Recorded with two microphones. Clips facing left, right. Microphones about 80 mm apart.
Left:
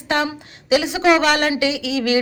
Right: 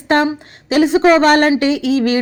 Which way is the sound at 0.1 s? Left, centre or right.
Right.